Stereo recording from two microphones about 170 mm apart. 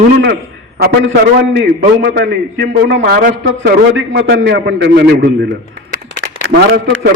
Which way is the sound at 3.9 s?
90° right.